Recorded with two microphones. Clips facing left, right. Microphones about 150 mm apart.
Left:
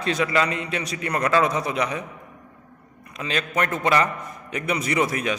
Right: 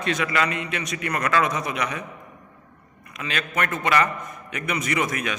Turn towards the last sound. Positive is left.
turn(degrees=30)  # may be behind; listen again after turning